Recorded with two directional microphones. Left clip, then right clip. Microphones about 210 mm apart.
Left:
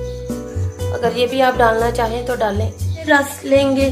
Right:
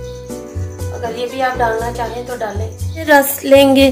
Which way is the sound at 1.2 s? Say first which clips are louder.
Left 2 dB; 50° left (ahead or behind).